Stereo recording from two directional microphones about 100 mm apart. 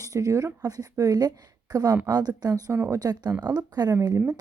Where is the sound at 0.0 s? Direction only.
35° right (ahead or behind).